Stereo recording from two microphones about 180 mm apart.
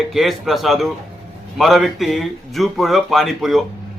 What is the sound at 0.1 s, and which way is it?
A man's voice, centre (ahead or behind).